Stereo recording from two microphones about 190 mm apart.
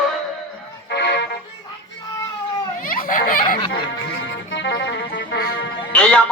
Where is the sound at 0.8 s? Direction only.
60° left (ahead or behind).